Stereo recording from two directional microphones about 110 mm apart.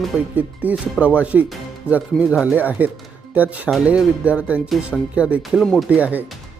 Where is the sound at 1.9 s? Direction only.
20° left (ahead or behind).